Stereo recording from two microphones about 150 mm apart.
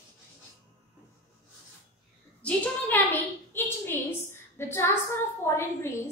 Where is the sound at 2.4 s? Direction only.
10° left (ahead or behind).